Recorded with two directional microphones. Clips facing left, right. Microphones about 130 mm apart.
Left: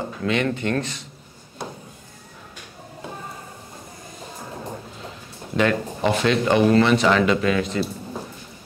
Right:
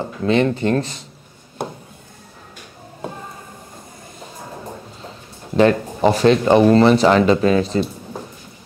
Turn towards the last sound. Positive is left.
turn(degrees=-35)  # may be behind; listen again after turning